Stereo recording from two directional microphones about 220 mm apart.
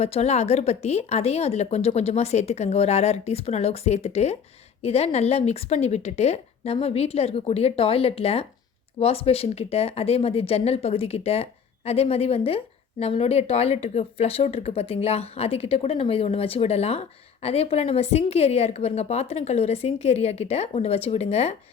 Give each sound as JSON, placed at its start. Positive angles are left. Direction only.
{"t": 0.0, "sound": "speech", "side_deg": 30}